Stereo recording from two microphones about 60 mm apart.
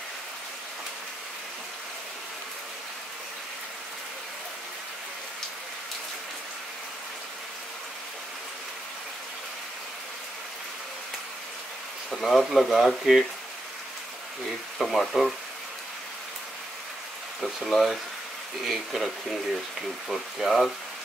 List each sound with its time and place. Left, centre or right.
12.1 s speech: centre
14.8 s speech: centre
17.4 s speech: centre
20.1 s speech: centre